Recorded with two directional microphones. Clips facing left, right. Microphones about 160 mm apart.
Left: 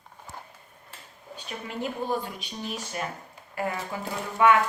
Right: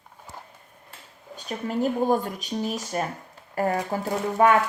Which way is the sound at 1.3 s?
40° right (ahead or behind).